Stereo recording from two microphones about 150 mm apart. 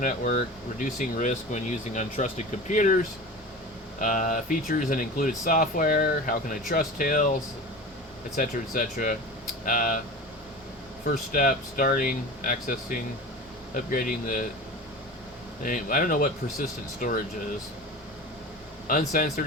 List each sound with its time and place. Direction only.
0.0 s speech: 60° left (ahead or behind)
8.4 s speech: 60° left (ahead or behind)
11.3 s speech: 65° left (ahead or behind)
15.6 s speech: 65° left (ahead or behind)
18.9 s speech: 65° left (ahead or behind)